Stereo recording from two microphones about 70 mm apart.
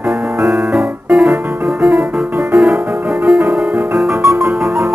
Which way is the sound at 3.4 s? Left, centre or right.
Right.